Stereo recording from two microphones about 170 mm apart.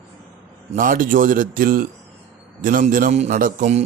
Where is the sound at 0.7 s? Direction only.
55° right (ahead or behind).